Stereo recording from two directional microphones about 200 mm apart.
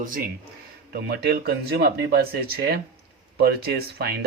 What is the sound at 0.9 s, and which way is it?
A man's voice, 55° right (ahead or behind).